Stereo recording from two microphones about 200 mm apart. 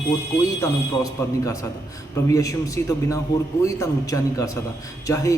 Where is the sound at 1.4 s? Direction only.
15° left (ahead or behind).